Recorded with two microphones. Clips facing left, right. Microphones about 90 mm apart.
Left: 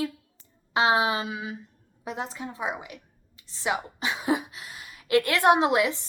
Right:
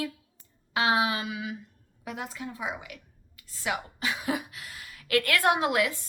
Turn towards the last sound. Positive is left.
turn(degrees=20)  # may be behind; listen again after turning